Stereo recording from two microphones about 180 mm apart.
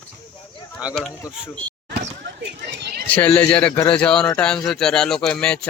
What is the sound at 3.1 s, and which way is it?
Speech, 10° left (ahead or behind).